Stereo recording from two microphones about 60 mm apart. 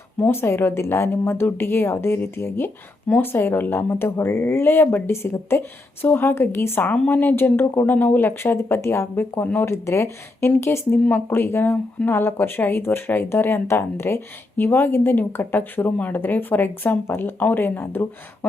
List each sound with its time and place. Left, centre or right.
0.2 s a woman's voice: left
8.7 s a woman's voice: left